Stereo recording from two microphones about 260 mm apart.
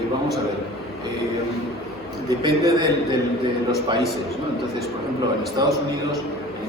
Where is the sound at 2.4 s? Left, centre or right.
Centre.